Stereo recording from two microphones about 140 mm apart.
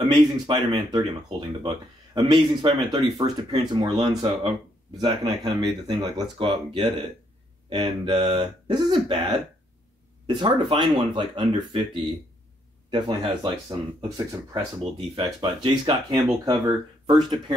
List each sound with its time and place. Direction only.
0.1 s speech: 35° right (ahead or behind)
14.8 s speech: 45° right (ahead or behind)
15.2 s speech: 30° right (ahead or behind)